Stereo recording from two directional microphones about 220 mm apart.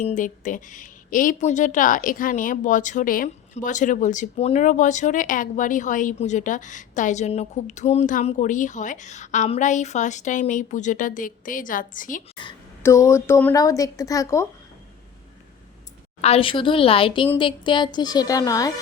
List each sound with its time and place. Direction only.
0.0 s a woman's voice: 35° left (ahead or behind)
12.4 s a woman's voice: 15° left (ahead or behind)
16.2 s speech: 25° left (ahead or behind)